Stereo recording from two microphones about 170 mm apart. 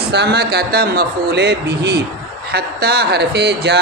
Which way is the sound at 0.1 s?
80° right.